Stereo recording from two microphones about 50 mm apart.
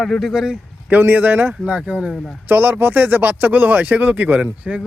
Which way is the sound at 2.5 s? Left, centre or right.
Right.